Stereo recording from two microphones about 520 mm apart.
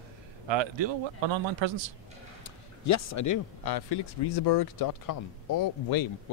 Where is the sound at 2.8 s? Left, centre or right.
Left.